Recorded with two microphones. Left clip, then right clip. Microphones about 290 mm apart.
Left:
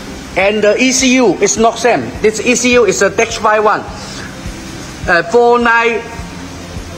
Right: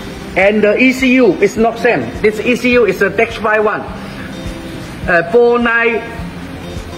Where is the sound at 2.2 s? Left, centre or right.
Centre.